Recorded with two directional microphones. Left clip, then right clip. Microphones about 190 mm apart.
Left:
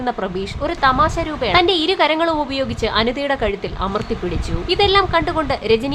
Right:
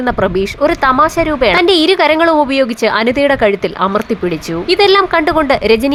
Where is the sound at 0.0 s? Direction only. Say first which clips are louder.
Right 9 dB; 25° right (ahead or behind).